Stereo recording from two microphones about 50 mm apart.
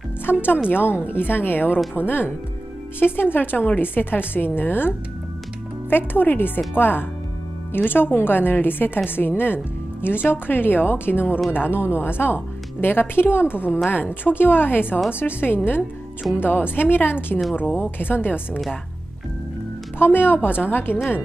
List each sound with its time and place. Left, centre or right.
0.3 s a woman's voice: left
20.0 s a woman's voice: left